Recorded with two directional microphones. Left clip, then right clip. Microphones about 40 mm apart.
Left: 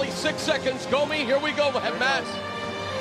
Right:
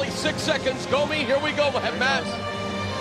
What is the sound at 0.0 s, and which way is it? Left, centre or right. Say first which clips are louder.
Speech: right 1 dB; right.